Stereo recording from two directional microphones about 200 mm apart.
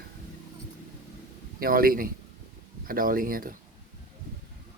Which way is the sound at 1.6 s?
45° right (ahead or behind).